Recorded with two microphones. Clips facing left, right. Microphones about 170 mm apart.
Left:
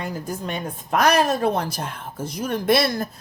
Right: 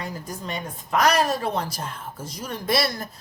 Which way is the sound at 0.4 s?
55° left (ahead or behind).